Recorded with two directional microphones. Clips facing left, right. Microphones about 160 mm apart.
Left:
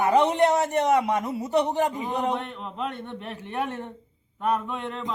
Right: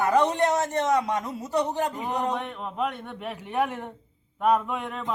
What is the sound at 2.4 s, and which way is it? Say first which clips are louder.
A man's voice: right 3 dB; 10° right (ahead or behind).